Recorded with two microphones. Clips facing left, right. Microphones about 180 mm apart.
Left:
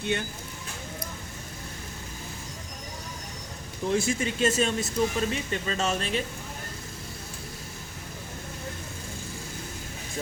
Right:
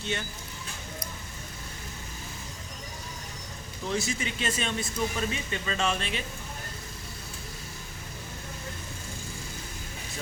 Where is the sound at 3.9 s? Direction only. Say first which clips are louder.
Left 5 dB; 50° left (ahead or behind).